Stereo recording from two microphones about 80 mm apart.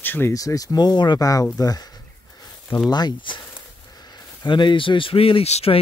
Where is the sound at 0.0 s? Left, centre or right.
Left.